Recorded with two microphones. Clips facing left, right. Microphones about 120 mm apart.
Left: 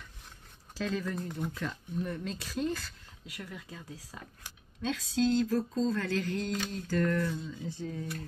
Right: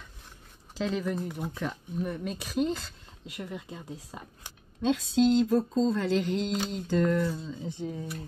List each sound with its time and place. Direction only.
0.7 s speech: 15° right (ahead or behind)